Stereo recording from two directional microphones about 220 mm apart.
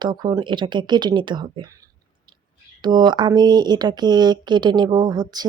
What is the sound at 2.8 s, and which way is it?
Speech, 20° right (ahead or behind).